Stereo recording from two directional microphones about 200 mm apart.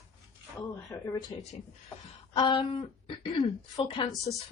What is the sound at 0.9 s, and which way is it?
A woman's voice, 15° left (ahead or behind).